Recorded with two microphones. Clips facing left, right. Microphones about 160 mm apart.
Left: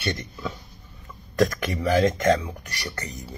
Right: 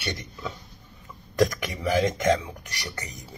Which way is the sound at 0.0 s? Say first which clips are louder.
Left 4 dB; 15° right (ahead or behind).